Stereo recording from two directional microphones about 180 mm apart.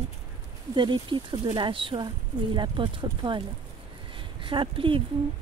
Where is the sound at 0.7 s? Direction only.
25° right (ahead or behind).